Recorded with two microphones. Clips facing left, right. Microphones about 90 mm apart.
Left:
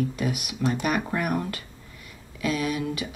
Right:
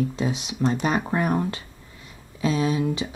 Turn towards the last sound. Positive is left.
turn(degrees=-30)  # may be behind; listen again after turning